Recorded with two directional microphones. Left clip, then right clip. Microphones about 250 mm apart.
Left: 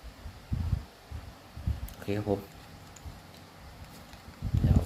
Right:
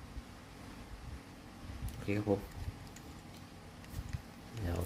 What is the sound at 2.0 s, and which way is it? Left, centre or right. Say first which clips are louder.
Speech: left 4 dB; centre.